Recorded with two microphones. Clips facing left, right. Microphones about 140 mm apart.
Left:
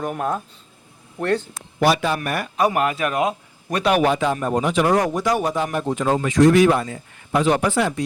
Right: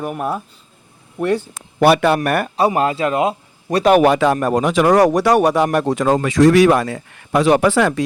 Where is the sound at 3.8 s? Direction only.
45° right (ahead or behind).